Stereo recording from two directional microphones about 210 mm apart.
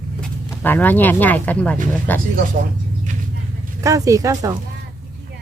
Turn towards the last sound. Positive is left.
turn(degrees=-15)  # may be behind; listen again after turning